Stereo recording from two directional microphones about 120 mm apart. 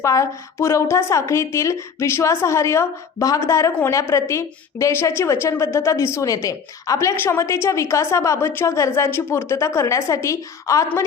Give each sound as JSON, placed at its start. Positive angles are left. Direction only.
{"t": 0.0, "sound": "a woman's voice", "side_deg": 25}